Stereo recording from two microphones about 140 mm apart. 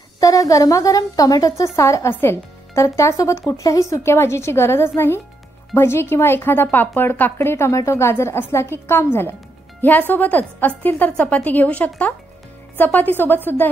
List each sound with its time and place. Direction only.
0.2 s a woman's voice: 25° left (ahead or behind)